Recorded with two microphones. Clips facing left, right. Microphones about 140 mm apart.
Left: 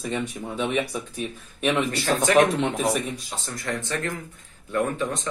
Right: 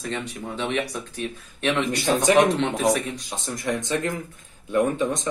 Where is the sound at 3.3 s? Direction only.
15° right (ahead or behind).